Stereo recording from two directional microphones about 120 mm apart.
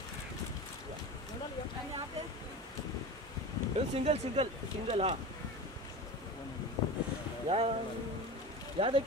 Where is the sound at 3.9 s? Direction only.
60° right (ahead or behind).